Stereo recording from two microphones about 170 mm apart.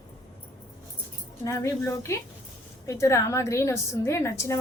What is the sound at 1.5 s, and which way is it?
A woman's voice, 20° left (ahead or behind).